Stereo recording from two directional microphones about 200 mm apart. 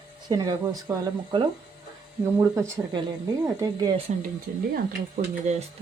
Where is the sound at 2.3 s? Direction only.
15° right (ahead or behind).